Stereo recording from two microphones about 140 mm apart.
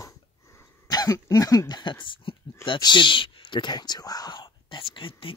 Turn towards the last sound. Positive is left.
turn(degrees=40)  # may be behind; listen again after turning